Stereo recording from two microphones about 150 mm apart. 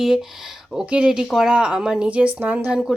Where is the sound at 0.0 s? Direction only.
5° right (ahead or behind).